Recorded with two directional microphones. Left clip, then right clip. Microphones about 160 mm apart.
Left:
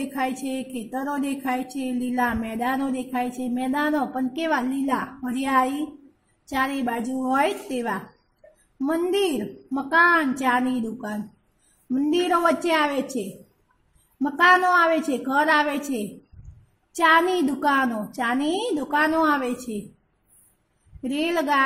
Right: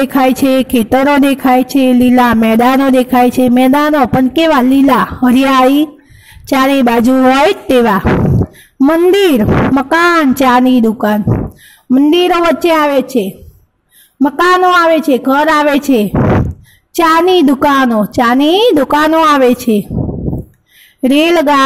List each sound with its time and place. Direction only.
0.1 s a woman's voice: 55° right (ahead or behind)
21.0 s a woman's voice: 55° right (ahead or behind)